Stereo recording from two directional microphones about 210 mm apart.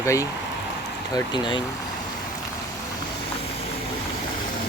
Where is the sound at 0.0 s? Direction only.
15° left (ahead or behind).